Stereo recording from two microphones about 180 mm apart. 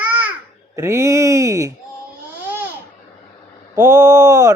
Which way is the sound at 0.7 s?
15° right (ahead or behind).